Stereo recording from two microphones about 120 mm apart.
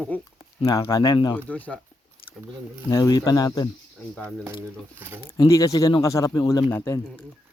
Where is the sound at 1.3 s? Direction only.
15° left (ahead or behind).